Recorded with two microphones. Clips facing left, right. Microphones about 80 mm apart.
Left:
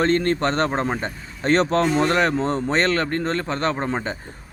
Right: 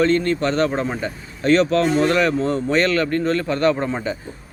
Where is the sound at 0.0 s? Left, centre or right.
Left.